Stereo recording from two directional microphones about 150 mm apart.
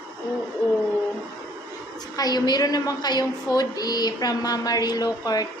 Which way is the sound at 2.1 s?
25° left (ahead or behind).